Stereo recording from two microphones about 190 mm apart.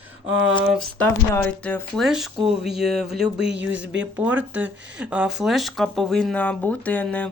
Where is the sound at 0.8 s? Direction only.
10° left (ahead or behind).